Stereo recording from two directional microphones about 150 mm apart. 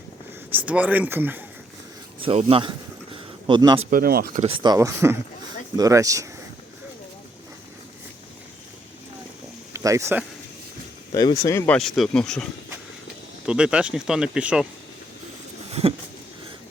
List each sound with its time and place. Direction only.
0.5 s speech: 10° right (ahead or behind)
2.2 s a man's voice: 40° right (ahead or behind)
3.8 s speech: 75° right (ahead or behind)
4.4 s speech: 30° right (ahead or behind)
9.7 s speech: 20° right (ahead or behind)
11.1 s speech: 25° left (ahead or behind)
11.8 s speech: centre (ahead or behind)
13.4 s speech: 5° right (ahead or behind)
15.7 s a sound: 40° right (ahead or behind)